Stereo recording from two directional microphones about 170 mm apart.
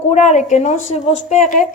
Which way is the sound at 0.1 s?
45° left (ahead or behind).